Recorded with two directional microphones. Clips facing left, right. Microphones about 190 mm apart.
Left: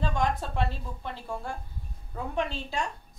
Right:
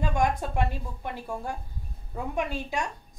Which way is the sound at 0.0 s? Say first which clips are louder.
Right 2 dB; 15° right (ahead or behind).